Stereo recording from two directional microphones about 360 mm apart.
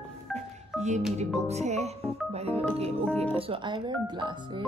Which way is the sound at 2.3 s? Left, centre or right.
Centre.